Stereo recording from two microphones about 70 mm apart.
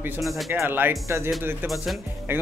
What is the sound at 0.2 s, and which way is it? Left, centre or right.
Speech, centre.